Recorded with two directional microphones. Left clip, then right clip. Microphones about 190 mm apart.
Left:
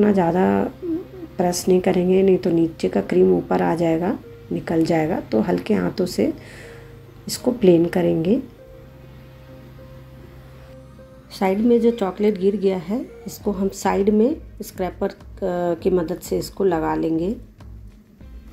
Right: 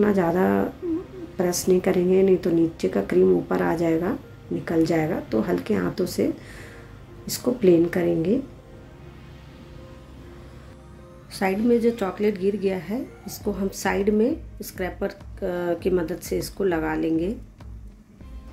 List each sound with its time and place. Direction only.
0.0 s a woman's voice: 10° left (ahead or behind)
11.3 s a woman's voice: 10° left (ahead or behind)